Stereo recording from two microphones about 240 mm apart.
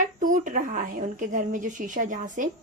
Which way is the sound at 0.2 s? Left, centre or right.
Right.